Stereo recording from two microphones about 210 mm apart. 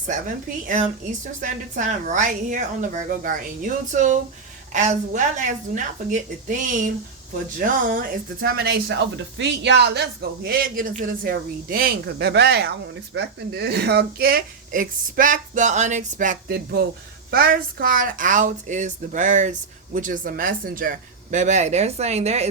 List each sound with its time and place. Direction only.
1.4 s speech: 35° right (ahead or behind)